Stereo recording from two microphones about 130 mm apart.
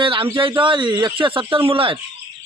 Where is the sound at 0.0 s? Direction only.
45° right (ahead or behind).